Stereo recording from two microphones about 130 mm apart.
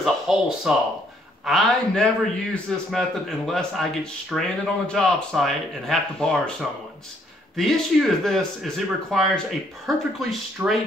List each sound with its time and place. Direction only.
0.0 s speech: 5° right (ahead or behind)
7.5 s speech: centre (ahead or behind)
10.6 s speech: 20° right (ahead or behind)